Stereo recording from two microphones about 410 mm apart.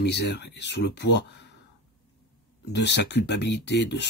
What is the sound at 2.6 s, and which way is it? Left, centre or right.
Speech, left.